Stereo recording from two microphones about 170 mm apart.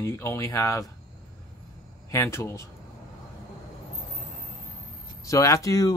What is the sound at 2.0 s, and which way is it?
Speech, 15° left (ahead or behind).